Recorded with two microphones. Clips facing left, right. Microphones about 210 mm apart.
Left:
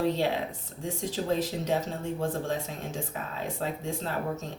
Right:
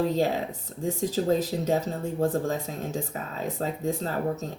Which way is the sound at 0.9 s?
40° right (ahead or behind).